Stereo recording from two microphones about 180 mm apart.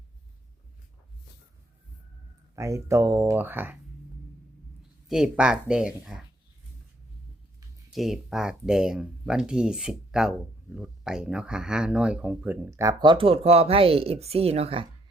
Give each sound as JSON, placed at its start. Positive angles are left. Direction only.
{"t": 2.6, "sound": "speech", "side_deg": -15}
{"t": 5.0, "sound": "speech", "side_deg": 0}
{"t": 7.9, "sound": "speech", "side_deg": 0}